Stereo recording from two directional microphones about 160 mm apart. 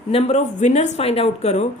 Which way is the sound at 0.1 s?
40° left (ahead or behind).